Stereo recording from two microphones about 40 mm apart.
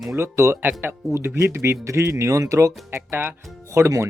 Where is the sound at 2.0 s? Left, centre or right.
Right.